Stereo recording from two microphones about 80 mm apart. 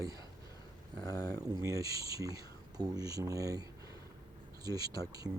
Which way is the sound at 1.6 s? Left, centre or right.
Right.